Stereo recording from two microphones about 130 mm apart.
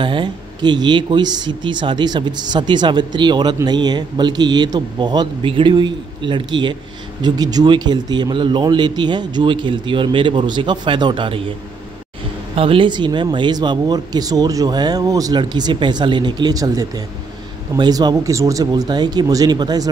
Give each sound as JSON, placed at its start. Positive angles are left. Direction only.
{"t": 0.0, "sound": "speech", "side_deg": -40}
{"t": 12.5, "sound": "speech", "side_deg": -45}